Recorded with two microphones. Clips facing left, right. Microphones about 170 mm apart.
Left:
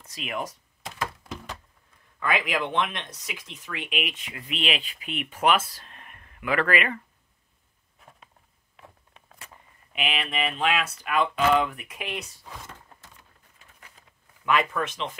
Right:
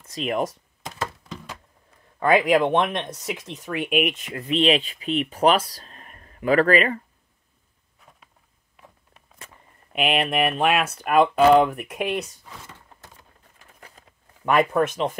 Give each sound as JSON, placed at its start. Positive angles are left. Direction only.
{"t": 0.1, "sound": "speech", "side_deg": -40}
{"t": 2.3, "sound": "speech", "side_deg": -50}
{"t": 4.5, "sound": "speech", "side_deg": -35}
{"t": 9.9, "sound": "speech", "side_deg": -55}
{"t": 14.4, "sound": "speech", "side_deg": -45}